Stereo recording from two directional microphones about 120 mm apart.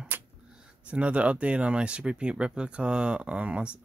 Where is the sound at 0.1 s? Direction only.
15° right (ahead or behind).